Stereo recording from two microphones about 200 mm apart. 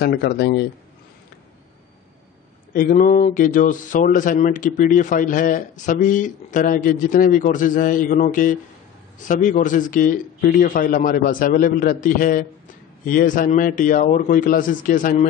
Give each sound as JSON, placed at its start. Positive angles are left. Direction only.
{"t": 0.0, "sound": "a man's voice", "side_deg": 55}
{"t": 2.7, "sound": "a man's voice", "side_deg": 45}